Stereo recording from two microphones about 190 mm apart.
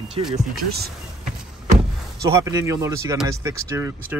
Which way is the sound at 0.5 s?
55° right (ahead or behind).